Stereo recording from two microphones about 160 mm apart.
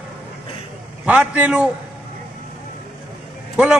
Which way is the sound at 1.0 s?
10° right (ahead or behind).